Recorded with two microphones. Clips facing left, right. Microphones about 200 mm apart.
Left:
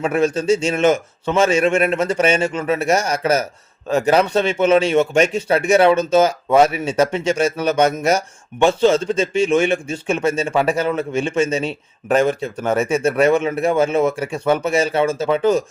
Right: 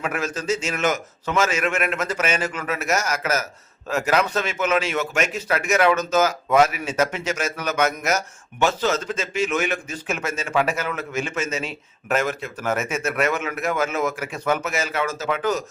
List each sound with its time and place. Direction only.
0.0 s a man's voice: 30° left (ahead or behind)